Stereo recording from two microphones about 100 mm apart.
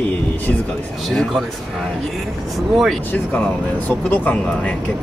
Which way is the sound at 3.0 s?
15° left (ahead or behind).